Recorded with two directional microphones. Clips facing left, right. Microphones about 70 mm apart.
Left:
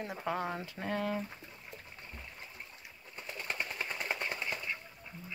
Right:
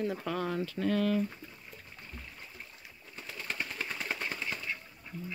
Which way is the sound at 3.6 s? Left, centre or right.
Centre.